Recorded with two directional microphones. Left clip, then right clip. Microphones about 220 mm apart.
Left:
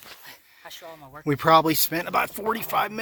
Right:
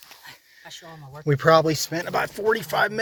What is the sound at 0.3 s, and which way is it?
Speech, 15° left (ahead or behind).